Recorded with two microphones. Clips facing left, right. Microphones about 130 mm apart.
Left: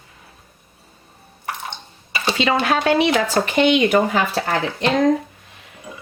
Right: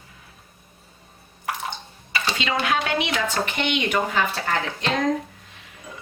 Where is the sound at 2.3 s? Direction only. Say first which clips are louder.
Left 6 dB; 40° left (ahead or behind).